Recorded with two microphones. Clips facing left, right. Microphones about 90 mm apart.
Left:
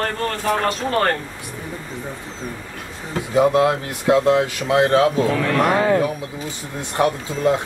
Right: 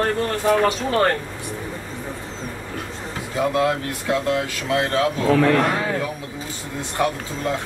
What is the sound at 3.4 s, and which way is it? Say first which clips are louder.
Speech: left 4 dB; 25° left (ahead or behind).